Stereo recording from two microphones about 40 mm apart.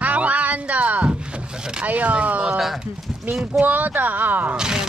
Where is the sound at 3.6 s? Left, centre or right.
Right.